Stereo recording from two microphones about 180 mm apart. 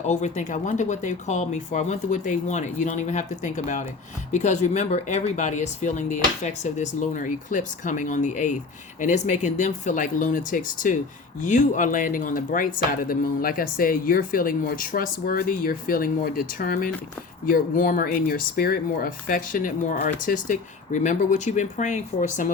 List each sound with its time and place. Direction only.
0.1 s speech: 40° left (ahead or behind)